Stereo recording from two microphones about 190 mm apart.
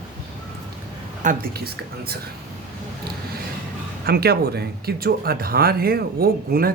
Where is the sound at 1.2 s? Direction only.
55° right (ahead or behind).